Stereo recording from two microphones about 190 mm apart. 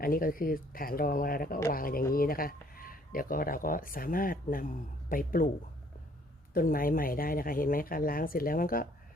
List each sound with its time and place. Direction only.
0.0 s speech: 50° left (ahead or behind)
6.5 s speech: 50° left (ahead or behind)